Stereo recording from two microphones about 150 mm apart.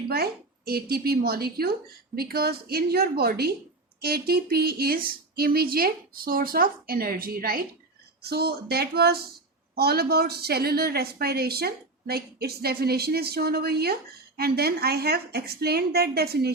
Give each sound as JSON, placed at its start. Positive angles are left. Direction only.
{"t": 0.1, "sound": "a woman's voice", "side_deg": -90}
{"t": 8.2, "sound": "a woman's voice", "side_deg": -90}